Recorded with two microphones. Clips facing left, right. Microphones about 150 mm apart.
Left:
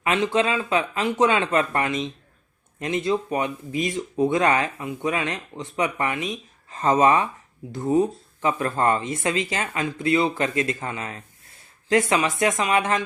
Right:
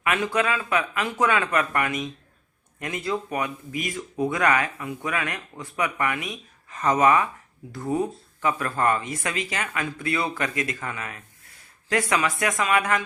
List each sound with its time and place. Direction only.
0.0 s speech: 25° left (ahead or behind)